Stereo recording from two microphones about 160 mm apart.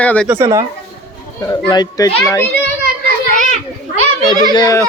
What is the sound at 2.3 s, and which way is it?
Speech, 10° left (ahead or behind).